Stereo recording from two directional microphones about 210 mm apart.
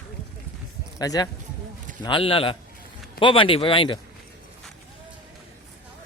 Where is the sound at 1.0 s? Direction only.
15° left (ahead or behind).